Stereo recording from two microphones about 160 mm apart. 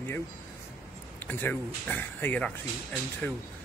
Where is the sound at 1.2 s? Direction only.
10° left (ahead or behind).